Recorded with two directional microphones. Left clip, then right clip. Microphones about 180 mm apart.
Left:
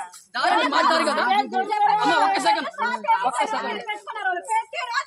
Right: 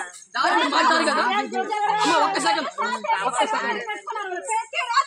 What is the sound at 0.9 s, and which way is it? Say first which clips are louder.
Speech: right 1 dB; 30° left (ahead or behind).